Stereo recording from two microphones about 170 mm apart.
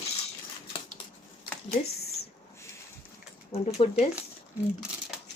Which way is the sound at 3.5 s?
35° left (ahead or behind).